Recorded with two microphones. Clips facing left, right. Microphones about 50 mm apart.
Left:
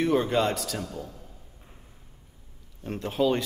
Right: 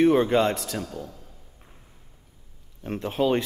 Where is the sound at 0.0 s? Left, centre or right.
Right.